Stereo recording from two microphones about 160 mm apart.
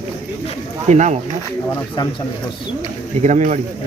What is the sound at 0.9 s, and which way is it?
Speech, 50° right (ahead or behind).